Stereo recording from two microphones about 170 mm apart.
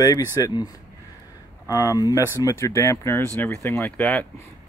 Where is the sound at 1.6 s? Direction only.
20° left (ahead or behind).